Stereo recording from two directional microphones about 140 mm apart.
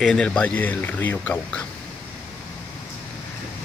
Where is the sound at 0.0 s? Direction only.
5° left (ahead or behind).